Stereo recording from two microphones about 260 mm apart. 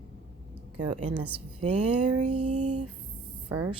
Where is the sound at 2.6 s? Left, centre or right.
Right.